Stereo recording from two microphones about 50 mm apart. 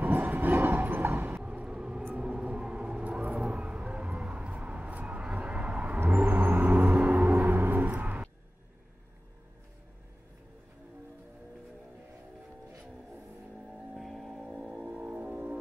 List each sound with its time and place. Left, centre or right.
0.0 s train: right
1.4 s vehicle: right
6.0 s a sound: right
7.9 s vehicle: right
13.9 s music: centre
14.5 s music: centre
15.0 s vehicle: right